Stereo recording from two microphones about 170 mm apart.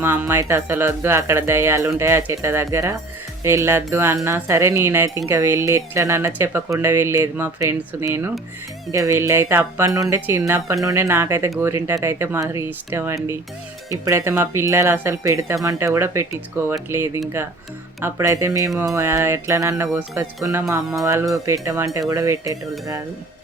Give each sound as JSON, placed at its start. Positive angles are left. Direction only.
{"t": 0.0, "sound": "speech", "side_deg": -15}